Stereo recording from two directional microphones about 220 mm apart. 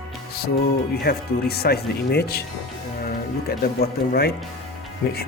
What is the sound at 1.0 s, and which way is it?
Speech, 45° left (ahead or behind).